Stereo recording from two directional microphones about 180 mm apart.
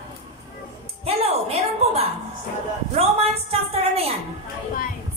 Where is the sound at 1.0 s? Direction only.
35° right (ahead or behind).